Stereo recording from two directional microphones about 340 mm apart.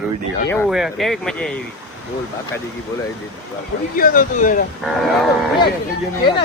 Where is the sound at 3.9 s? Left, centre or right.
Left.